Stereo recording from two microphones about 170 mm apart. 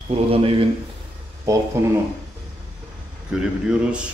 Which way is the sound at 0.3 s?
35° right (ahead or behind).